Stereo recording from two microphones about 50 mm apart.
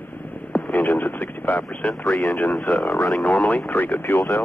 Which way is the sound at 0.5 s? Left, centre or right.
Left.